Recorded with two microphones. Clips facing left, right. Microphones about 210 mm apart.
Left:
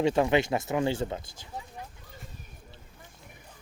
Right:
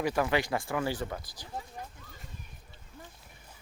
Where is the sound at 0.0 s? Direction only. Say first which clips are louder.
Left 5 dB; 25° left (ahead or behind).